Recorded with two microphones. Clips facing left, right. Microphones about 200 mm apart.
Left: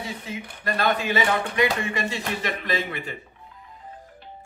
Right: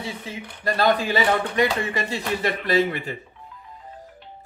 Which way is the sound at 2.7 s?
40° right (ahead or behind).